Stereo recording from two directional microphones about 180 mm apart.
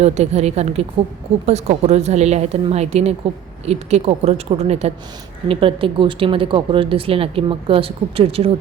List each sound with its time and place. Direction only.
0.0 s speech: 35° right (ahead or behind)